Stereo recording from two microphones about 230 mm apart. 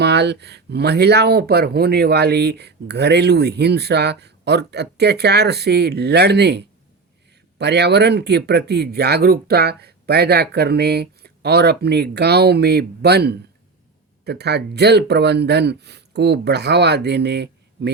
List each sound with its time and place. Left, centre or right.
0.0 s speech: right